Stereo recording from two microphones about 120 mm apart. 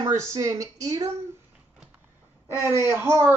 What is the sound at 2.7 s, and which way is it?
Speech, 20° right (ahead or behind).